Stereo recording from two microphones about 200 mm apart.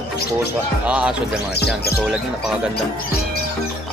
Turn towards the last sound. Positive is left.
turn(degrees=55)  # may be behind; listen again after turning